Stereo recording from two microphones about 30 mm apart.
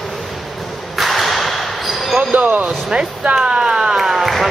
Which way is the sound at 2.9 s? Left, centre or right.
Right.